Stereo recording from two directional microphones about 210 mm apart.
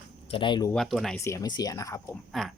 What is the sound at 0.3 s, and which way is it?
Speech, 25° left (ahead or behind).